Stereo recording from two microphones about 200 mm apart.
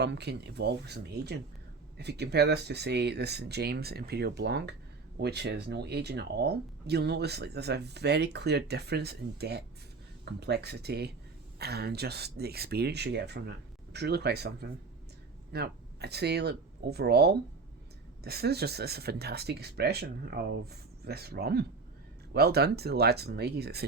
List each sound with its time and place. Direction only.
0.0 s speech: 55° right (ahead or behind)